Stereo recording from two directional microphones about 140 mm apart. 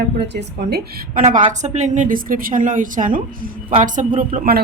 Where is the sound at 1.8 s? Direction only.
60° right (ahead or behind); by 4.6 s 75° right (ahead or behind).